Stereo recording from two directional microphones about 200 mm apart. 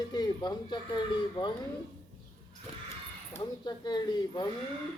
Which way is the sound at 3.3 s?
20° left (ahead or behind).